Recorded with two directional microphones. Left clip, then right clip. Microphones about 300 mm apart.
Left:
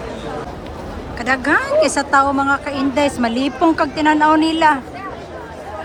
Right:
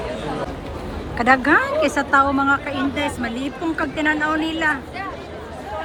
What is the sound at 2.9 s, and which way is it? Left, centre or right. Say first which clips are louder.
A woman's voice: left 7 dB; centre.